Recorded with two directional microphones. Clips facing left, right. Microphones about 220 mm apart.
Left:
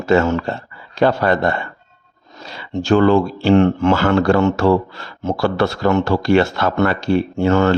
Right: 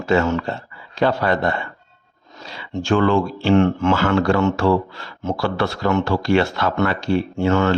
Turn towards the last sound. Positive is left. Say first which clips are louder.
# left 3 dB
turn(degrees=40)  # may be behind; listen again after turning